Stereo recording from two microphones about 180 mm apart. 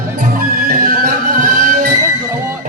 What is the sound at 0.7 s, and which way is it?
Music, 50° right (ahead or behind).